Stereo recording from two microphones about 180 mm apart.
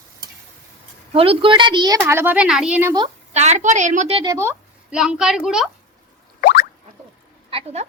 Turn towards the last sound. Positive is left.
turn(degrees=-35)  # may be behind; listen again after turning